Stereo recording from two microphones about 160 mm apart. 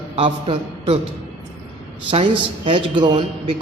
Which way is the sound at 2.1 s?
35° right (ahead or behind).